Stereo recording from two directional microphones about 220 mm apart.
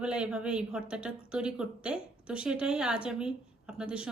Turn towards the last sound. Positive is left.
turn(degrees=-5)  # may be behind; listen again after turning